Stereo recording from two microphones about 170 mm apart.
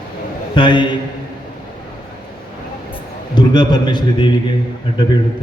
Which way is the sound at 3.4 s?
25° left (ahead or behind).